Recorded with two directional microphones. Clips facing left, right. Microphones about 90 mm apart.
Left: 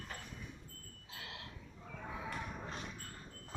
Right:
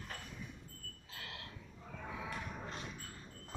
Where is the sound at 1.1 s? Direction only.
20° left (ahead or behind).